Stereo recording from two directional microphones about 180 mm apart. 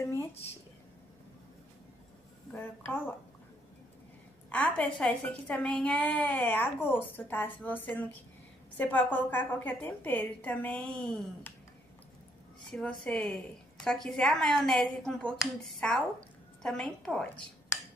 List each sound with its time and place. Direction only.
0.0 s a woman's voice: 15° left (ahead or behind)
2.5 s a woman's voice: 10° left (ahead or behind)
4.5 s a woman's voice: 10° left (ahead or behind)
12.7 s a woman's voice: 5° left (ahead or behind)